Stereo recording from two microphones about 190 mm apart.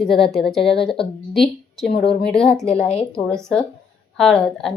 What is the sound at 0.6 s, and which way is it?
Speech, 60° left (ahead or behind).